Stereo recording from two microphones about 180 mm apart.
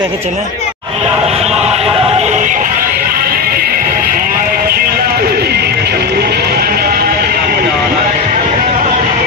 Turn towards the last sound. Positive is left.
turn(degrees=-60)  # may be behind; listen again after turning